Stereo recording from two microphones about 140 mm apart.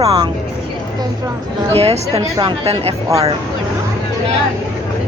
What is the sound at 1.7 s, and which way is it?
Speech, 45° right (ahead or behind).